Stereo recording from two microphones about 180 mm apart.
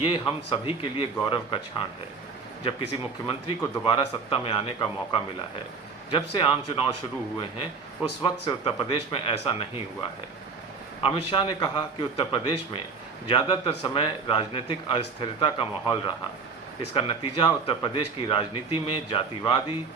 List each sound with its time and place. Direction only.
0.0 s a man's voice: 25° left (ahead or behind)
3.6 s a man's voice: 25° left (ahead or behind)
8.2 s a man's voice: 30° left (ahead or behind)
11.0 s a man's voice: 30° left (ahead or behind)